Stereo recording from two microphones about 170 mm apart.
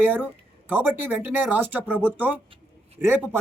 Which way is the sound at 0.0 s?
10° right (ahead or behind).